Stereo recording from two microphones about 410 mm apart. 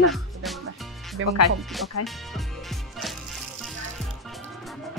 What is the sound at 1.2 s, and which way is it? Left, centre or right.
Speech, right.